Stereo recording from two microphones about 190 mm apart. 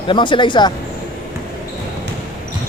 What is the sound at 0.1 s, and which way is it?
Speech, 25° left (ahead or behind).